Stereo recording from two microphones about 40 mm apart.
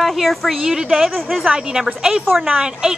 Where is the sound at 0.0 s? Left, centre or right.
Centre.